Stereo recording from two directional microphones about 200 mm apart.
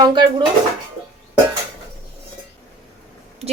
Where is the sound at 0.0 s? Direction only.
20° right (ahead or behind).